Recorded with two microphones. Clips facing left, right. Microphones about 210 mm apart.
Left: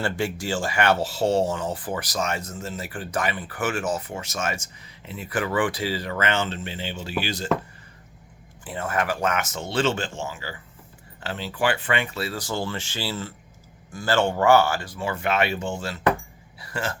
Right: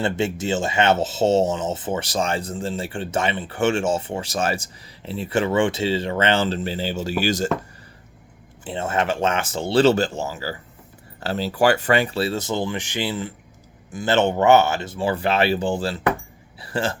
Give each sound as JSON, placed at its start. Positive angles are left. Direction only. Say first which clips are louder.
{"t": 0.0, "sound": "speech", "louder": "right 4 dB", "side_deg": -20}
{"t": 8.6, "sound": "speech", "louder": "right 3 dB", "side_deg": -25}
{"t": 16.6, "sound": "a sound", "louder": "right 5 dB", "side_deg": -30}